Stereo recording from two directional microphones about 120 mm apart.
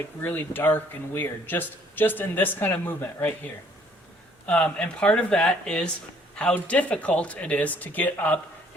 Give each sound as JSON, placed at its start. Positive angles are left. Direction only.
{"t": 0.2, "sound": "speech", "side_deg": 15}